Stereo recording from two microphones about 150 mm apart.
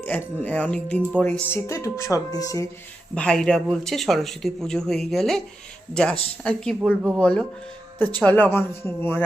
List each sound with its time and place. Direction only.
0.0 s speech: 10° left (ahead or behind)
3.2 s speech: 5° left (ahead or behind)